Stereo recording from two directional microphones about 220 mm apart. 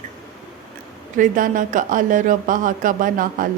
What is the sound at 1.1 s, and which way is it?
A woman's voice, 35° right (ahead or behind).